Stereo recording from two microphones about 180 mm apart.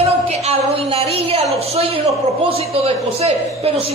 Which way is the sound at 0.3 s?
35° right (ahead or behind).